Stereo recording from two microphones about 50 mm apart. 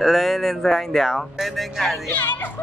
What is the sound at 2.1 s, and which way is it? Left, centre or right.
Speech, left.